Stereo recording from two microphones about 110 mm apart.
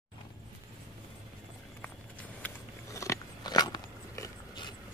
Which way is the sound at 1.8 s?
15° left (ahead or behind).